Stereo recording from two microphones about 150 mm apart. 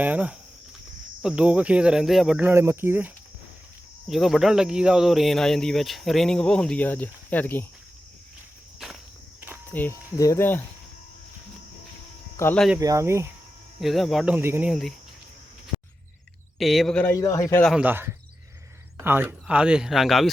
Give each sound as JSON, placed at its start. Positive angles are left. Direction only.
{"t": 0.0, "sound": "speech", "side_deg": -10}
{"t": 4.1, "sound": "speech", "side_deg": 0}
{"t": 8.8, "sound": "walk", "side_deg": 0}
{"t": 9.7, "sound": "speech", "side_deg": 15}
{"t": 12.4, "sound": "speech", "side_deg": 15}
{"t": 12.8, "sound": "speech", "side_deg": -20}
{"t": 13.8, "sound": "speech", "side_deg": 0}
{"t": 14.7, "sound": "speech", "side_deg": 0}
{"t": 16.6, "sound": "speech", "side_deg": 0}
{"t": 17.2, "sound": "a man's voice", "side_deg": 20}
{"t": 17.7, "sound": "speech", "side_deg": -15}